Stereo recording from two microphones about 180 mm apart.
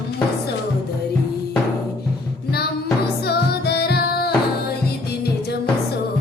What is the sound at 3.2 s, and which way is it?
Music, 65° left (ahead or behind).